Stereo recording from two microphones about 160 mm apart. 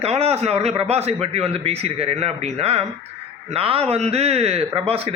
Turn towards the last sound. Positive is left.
turn(degrees=-40)  # may be behind; listen again after turning